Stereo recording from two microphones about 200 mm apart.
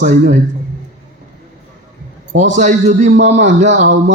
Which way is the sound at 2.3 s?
35° right (ahead or behind).